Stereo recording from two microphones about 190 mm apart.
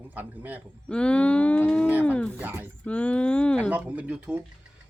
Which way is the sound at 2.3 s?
10° right (ahead or behind).